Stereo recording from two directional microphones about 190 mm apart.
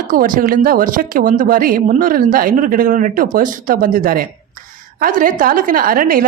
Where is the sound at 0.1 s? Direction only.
45° right (ahead or behind).